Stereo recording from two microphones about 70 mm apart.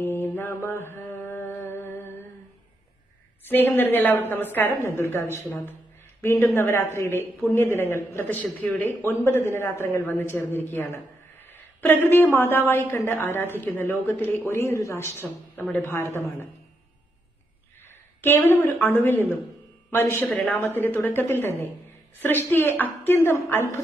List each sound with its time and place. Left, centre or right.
0.0 s mantra: left
3.4 s a woman's voice: left
15.5 s a man's voice: left
18.2 s a woman's voice: left
20.4 s a woman's voice: left
22.5 s a man's voice: left